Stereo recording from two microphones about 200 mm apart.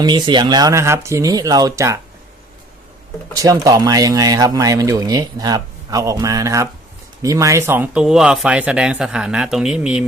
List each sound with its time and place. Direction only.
0.0 s speech: 20° right (ahead or behind)
3.3 s speech: 15° right (ahead or behind)